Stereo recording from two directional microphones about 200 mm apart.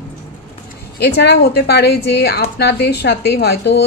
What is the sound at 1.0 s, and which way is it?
A woman's voice, 55° left (ahead or behind).